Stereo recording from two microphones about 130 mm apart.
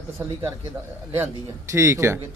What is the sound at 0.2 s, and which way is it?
Speech, 20° right (ahead or behind).